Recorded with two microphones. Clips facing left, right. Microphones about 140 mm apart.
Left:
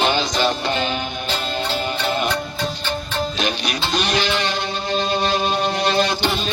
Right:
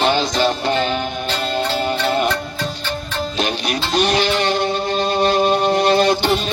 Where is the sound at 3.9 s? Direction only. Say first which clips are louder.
Right 5 dB; 50° right (ahead or behind).